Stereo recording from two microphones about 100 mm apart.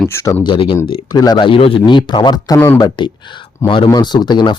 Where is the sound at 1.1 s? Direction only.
45° left (ahead or behind).